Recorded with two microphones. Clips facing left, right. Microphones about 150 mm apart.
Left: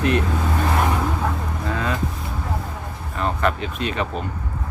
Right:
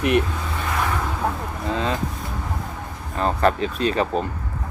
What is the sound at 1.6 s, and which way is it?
Vehicle, 25° right (ahead or behind).